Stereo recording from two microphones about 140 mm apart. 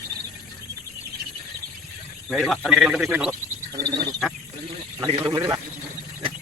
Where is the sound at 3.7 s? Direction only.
30° right (ahead or behind).